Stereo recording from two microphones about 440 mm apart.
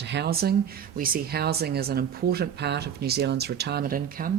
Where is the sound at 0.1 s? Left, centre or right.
Right.